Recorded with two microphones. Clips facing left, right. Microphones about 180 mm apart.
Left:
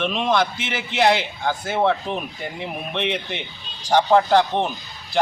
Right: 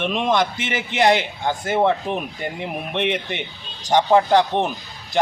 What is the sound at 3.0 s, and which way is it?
Speech, 55° right (ahead or behind).